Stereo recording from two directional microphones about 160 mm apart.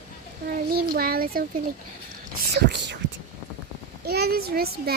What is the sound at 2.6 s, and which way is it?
Speech, 90° right.